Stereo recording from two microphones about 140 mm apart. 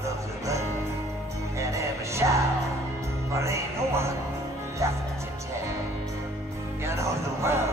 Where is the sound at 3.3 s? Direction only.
20° right (ahead or behind).